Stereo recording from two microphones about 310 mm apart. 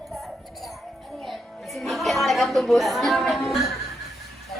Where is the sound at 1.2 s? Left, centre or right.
Centre.